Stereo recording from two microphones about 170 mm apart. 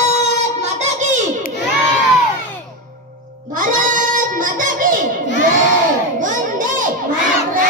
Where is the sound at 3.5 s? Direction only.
50° right (ahead or behind).